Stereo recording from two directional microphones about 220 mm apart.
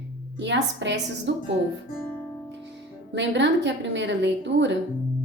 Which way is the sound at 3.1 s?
55° right (ahead or behind).